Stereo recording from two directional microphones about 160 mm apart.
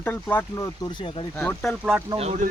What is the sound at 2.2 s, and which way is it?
Speech, 40° right (ahead or behind).